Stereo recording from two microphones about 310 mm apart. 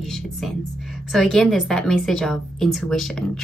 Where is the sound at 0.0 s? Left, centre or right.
Centre.